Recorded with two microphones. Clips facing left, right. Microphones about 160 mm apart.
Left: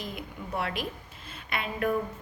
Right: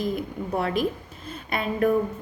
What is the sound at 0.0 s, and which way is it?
A woman's voice, 40° right (ahead or behind).